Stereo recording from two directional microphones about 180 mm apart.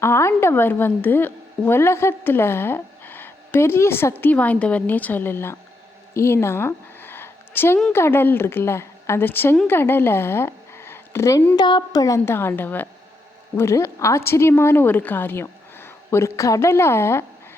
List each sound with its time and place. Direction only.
0.0 s a woman's voice: 15° left (ahead or behind)
6.1 s a sound: 15° left (ahead or behind)
7.8 s a woman's voice: 10° left (ahead or behind)